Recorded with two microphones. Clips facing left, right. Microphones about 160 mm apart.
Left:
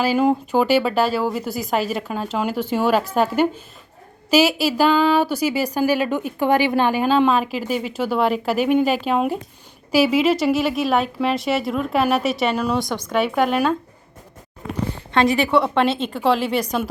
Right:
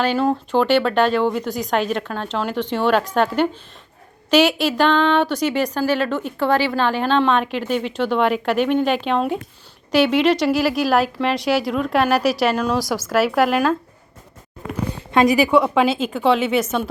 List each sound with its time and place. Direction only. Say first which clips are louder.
0.0 s a woman's voice: left 1 dB; 10° left (ahead or behind)
15.4 s speech: right 2 dB; centre (ahead or behind)